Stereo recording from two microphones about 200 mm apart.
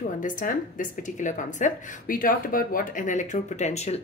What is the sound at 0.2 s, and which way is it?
A woman's voice, 40° left (ahead or behind).